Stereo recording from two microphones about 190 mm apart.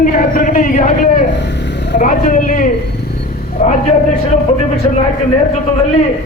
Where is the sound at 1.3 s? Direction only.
70° left (ahead or behind).